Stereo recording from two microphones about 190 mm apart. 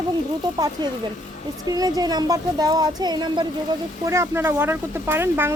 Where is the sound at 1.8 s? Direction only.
20° right (ahead or behind).